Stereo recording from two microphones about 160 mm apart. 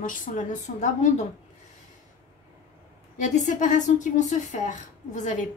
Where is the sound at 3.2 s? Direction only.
50° left (ahead or behind).